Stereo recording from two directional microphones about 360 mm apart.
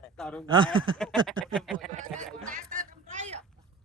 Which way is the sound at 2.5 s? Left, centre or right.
Right.